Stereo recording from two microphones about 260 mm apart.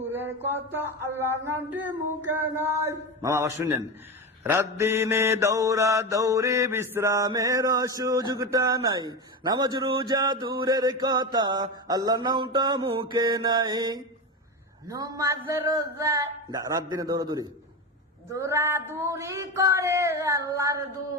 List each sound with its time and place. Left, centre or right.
0.1 s mantra: centre